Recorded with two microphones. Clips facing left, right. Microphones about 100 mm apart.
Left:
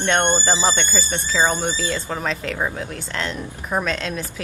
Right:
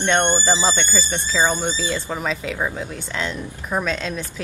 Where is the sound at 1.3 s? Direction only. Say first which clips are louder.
Even; 15° left (ahead or behind).